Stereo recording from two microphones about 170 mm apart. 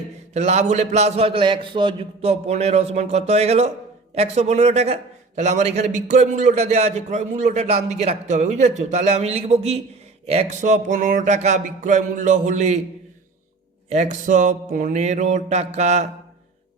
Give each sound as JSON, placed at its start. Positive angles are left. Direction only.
{"t": 0.3, "sound": "a man's voice", "side_deg": -40}
{"t": 10.2, "sound": "music", "side_deg": -40}
{"t": 13.9, "sound": "music", "side_deg": -45}